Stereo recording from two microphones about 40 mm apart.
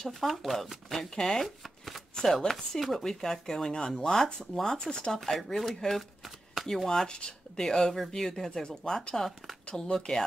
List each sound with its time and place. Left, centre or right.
0.0 s speech: centre
1.4 s speech: centre
4.9 s speech: left
5.2 s speech: centre
7.1 s speech: left